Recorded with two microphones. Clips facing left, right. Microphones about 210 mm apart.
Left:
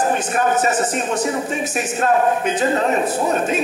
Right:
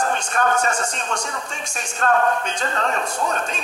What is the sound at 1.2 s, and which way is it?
Speech, 20° left (ahead or behind).